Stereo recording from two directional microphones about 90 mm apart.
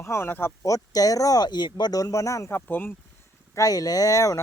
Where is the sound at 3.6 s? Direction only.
40° left (ahead or behind).